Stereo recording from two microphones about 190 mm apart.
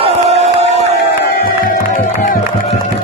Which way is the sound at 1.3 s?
50° left (ahead or behind).